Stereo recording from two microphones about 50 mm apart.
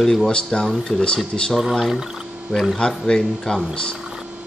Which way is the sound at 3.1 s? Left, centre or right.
Centre.